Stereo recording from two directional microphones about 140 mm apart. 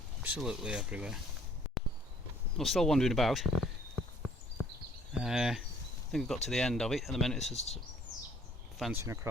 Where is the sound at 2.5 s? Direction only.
Centre (ahead or behind).